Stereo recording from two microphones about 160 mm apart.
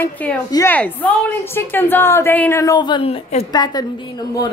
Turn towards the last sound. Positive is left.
turn(degrees=25)  # may be behind; listen again after turning